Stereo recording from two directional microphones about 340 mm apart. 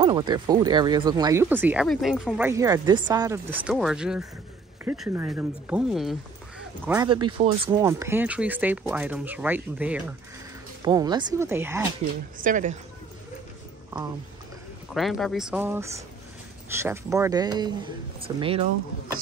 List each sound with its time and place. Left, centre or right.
0.0 s speech: centre
12.4 s speech: right
15.0 s speech: centre